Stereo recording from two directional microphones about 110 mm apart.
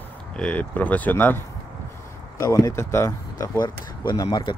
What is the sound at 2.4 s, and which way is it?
Speech, 30° left (ahead or behind).